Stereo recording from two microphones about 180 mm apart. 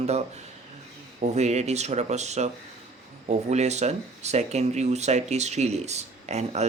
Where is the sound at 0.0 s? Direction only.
35° right (ahead or behind).